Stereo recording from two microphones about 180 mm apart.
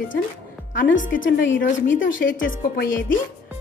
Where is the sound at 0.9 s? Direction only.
90° left.